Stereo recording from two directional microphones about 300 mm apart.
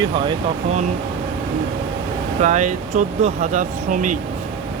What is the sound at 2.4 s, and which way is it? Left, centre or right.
Speech, right.